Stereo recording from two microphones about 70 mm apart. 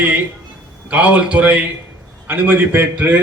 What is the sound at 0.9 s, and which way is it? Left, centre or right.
A man's voice, right.